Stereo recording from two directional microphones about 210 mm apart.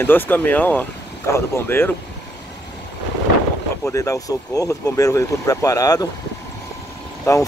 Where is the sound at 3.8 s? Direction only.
15° left (ahead or behind).